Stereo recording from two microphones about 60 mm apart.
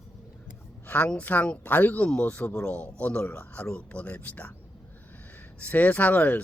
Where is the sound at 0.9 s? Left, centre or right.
Left.